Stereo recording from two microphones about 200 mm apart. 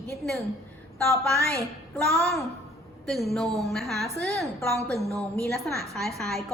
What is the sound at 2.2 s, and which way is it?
A woman's voice, centre (ahead or behind).